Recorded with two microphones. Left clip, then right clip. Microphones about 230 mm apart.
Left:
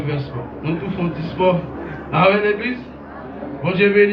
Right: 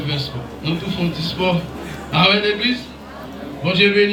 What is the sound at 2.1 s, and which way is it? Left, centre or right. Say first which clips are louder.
A man's voice: left 1 dB; right.